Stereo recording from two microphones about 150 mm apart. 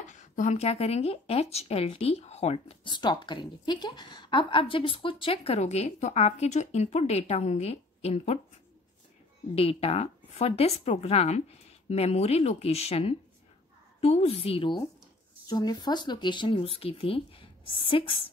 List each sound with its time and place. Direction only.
0.0 s speech: 55° left (ahead or behind)
9.6 s speech: 40° left (ahead or behind)
15.4 s speech: 25° left (ahead or behind)